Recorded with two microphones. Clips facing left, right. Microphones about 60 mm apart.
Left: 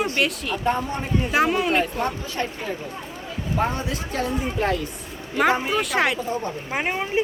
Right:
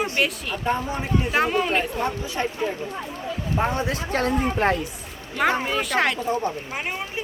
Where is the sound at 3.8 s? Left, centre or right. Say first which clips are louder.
Right 3 dB; right.